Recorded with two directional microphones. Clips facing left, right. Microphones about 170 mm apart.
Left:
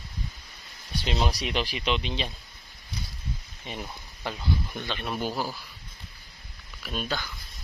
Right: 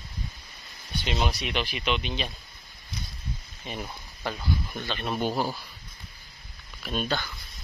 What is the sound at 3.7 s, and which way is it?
Speech, 20° left (ahead or behind).